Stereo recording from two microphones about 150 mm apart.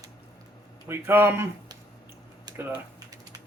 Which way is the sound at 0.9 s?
15° right (ahead or behind).